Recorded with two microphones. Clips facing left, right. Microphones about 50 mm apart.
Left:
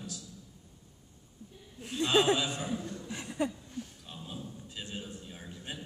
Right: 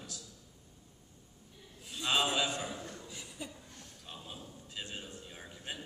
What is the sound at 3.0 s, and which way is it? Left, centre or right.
Chuckle, left.